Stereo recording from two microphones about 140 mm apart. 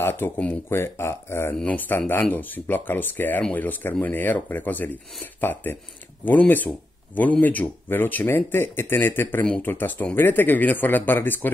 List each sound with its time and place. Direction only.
0.0 s speech: 15° left (ahead or behind)